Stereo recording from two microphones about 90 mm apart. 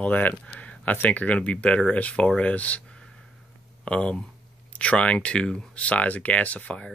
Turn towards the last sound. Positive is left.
turn(degrees=15)  # may be behind; listen again after turning